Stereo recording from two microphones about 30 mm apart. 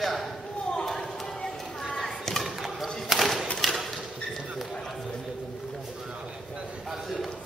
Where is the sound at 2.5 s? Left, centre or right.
Centre.